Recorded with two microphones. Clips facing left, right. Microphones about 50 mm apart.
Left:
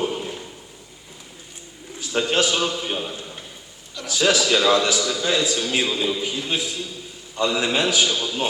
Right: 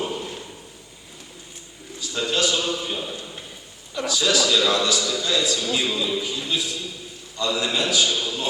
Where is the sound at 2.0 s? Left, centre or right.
Left.